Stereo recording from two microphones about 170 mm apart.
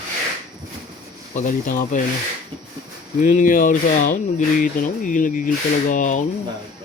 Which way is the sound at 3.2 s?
50° left (ahead or behind).